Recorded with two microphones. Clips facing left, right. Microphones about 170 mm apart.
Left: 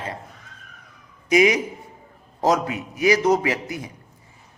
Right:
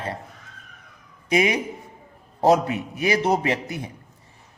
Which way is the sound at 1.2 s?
30° right (ahead or behind).